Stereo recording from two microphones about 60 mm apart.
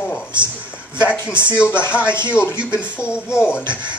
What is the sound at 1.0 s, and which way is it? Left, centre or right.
Speech, left.